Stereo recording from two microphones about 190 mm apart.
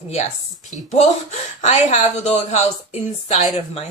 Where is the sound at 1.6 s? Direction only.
35° left (ahead or behind).